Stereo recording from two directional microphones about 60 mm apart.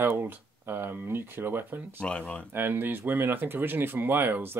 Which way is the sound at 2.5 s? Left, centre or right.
Right.